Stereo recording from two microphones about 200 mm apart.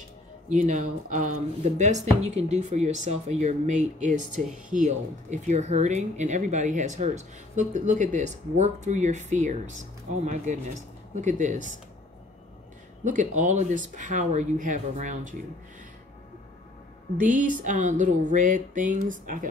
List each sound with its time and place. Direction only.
0.5 s speech: 35° right (ahead or behind)
13.0 s speech: 40° right (ahead or behind)
17.2 s speech: 40° right (ahead or behind)